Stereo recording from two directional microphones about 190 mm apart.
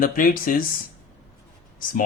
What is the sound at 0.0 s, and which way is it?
Speech, 50° left (ahead or behind).